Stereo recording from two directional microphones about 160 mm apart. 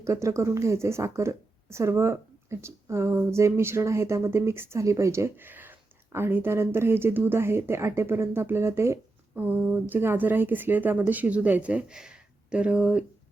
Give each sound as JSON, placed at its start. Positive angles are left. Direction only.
{"t": 0.0, "sound": "a woman's voice", "side_deg": -20}